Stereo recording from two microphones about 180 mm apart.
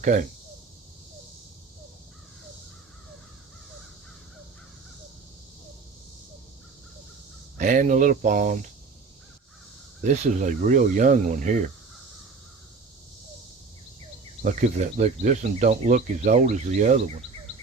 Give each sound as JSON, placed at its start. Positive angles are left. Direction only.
{"t": 0.0, "sound": "speech", "side_deg": -45}
{"t": 7.6, "sound": "speech", "side_deg": -45}
{"t": 10.0, "sound": "speech", "side_deg": -45}
{"t": 14.4, "sound": "speech", "side_deg": -45}